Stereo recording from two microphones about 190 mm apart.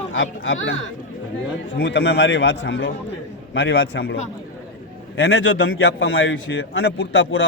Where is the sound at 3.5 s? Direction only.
85° left.